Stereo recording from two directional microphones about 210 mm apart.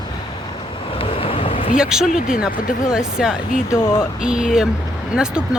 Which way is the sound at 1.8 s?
5° right (ahead or behind).